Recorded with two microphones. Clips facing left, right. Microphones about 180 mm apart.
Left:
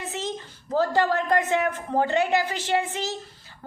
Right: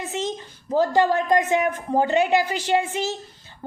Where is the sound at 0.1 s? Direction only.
20° right (ahead or behind).